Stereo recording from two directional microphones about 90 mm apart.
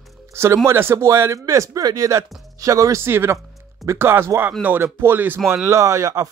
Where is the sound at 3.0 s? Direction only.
25° right (ahead or behind).